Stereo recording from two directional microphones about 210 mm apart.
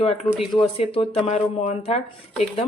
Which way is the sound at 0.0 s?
30° left (ahead or behind).